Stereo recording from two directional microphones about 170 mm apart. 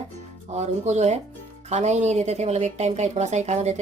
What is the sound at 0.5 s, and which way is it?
Speech, 40° right (ahead or behind).